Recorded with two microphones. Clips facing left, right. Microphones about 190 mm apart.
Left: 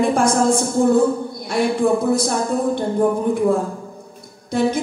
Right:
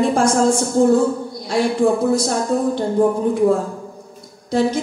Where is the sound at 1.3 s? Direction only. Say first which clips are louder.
Right 1 dB; 55° left (ahead or behind).